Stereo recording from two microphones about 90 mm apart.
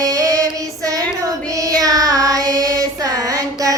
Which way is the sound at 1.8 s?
40° right (ahead or behind).